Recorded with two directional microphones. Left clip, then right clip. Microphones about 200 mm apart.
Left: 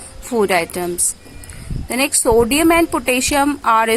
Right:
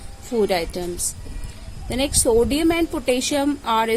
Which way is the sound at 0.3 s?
15° left (ahead or behind).